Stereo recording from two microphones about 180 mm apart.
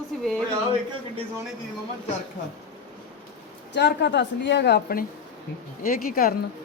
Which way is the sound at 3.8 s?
70° left (ahead or behind).